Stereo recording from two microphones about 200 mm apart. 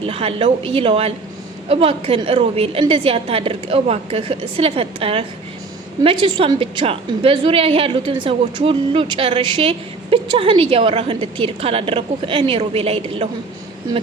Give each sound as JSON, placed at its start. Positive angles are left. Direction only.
{"t": 0.0, "sound": "a woman's voice", "side_deg": -30}